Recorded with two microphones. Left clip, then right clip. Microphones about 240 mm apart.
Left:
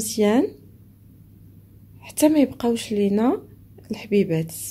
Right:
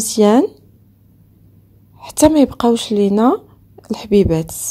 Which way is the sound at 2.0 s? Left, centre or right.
Right.